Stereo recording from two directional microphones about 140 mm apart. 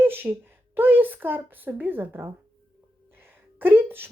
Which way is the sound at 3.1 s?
15° right (ahead or behind).